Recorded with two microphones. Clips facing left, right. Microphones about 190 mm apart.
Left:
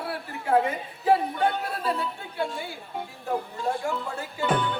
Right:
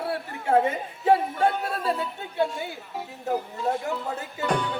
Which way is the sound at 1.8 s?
25° right (ahead or behind).